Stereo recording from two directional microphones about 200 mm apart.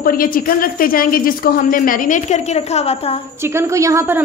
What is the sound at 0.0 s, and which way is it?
A woman's voice, 45° left (ahead or behind).